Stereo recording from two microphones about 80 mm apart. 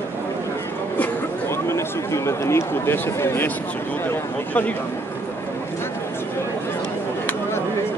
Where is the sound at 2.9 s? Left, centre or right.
Left.